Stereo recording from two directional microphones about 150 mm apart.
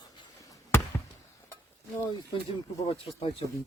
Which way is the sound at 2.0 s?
30° left (ahead or behind).